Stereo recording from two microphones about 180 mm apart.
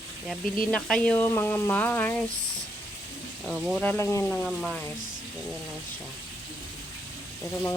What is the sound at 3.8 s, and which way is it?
Speech, 10° left (ahead or behind).